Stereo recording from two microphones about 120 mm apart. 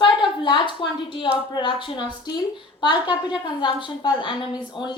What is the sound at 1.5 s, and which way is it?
A woman's voice, 40° left (ahead or behind).